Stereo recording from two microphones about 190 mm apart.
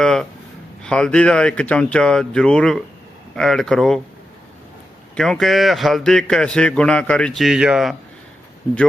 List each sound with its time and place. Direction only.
0.0 s a sound: 5° left (ahead or behind)
0.8 s speech: 5° left (ahead or behind)
5.1 s speech: centre (ahead or behind)